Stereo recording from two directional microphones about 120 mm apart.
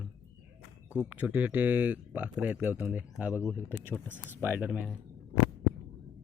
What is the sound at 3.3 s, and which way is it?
Speech, 20° left (ahead or behind).